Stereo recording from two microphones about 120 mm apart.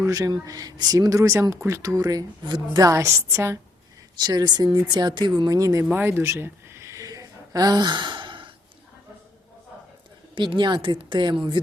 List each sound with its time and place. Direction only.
0.0 s speech: 30° right (ahead or behind)
4.3 s speech: 35° right (ahead or behind)
5.9 s a sound: 20° right (ahead or behind); by 8.4 s 40° right (ahead or behind)
10.3 s speech: 40° right (ahead or behind)